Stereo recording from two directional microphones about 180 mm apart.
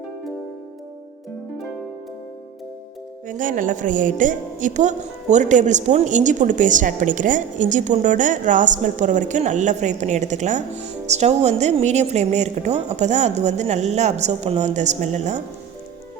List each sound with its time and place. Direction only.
3.2 s a woman's voice: 45° right (ahead or behind)